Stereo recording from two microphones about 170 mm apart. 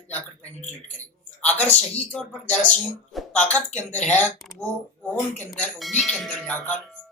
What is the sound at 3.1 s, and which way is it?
A man's voice, 10° left (ahead or behind).